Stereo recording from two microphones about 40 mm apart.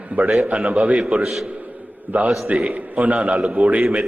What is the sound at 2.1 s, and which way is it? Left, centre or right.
Speech, right.